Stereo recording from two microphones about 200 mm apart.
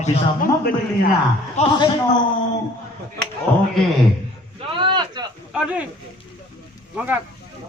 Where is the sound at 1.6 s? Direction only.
35° left (ahead or behind).